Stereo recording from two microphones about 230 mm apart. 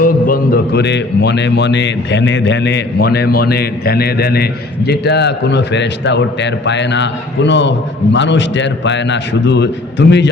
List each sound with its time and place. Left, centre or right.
0.0 s a man's voice: left